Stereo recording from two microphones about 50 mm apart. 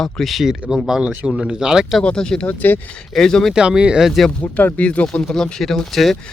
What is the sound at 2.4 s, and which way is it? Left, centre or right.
Speech, left.